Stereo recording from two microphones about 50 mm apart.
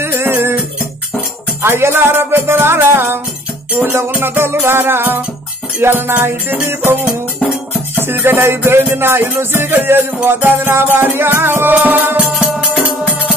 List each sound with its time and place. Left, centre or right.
0.0 s music: right
1.6 s music: right
4.2 s music: right
8.1 s music: right
11.7 s music: right
12.2 s music: centre